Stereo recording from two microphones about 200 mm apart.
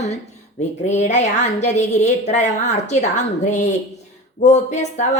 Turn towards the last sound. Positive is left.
turn(degrees=35)  # may be behind; listen again after turning